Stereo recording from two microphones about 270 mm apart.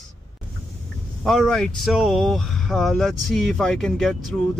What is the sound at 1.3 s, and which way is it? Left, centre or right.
Speech, centre.